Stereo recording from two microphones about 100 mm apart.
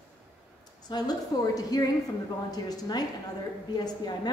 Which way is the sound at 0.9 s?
50° left (ahead or behind).